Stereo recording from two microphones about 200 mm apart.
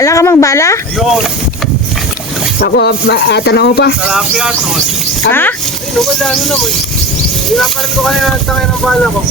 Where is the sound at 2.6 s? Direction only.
55° left (ahead or behind).